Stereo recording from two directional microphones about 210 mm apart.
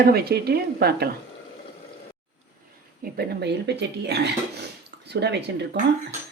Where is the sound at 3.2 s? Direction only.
55° right (ahead or behind).